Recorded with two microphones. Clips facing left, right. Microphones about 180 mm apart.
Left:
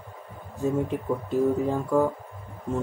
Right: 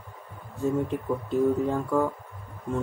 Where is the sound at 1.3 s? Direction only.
Centre (ahead or behind).